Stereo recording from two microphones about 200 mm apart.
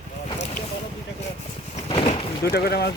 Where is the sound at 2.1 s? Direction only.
50° left (ahead or behind).